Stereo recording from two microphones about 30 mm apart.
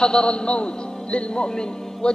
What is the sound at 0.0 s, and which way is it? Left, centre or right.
Speech, left.